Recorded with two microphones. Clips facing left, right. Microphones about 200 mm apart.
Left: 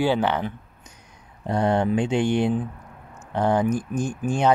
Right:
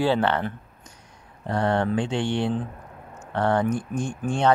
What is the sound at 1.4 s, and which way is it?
Speech, 15° left (ahead or behind).